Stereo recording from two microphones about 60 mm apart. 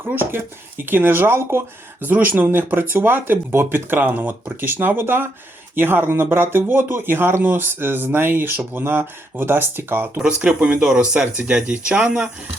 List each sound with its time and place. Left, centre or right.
0.1 s speech: right
2.0 s speech: right
10.2 s speech: centre